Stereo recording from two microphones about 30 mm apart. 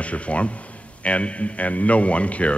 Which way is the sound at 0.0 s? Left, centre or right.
Left.